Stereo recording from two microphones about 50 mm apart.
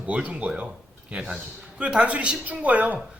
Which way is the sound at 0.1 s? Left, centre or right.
Right.